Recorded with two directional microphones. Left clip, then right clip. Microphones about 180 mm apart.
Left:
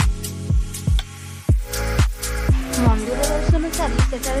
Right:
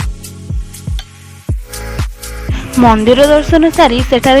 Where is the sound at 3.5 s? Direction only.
40° right (ahead or behind).